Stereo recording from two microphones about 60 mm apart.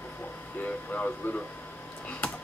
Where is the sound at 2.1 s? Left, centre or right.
Left.